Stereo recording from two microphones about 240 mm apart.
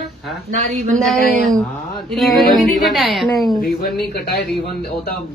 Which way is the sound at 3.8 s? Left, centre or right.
Left.